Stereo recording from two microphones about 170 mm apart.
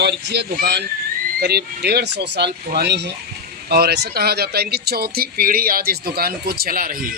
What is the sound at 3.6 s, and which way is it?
Speech, 65° right (ahead or behind).